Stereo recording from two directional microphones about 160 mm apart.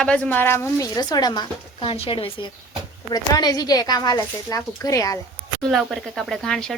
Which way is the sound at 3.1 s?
25° left (ahead or behind).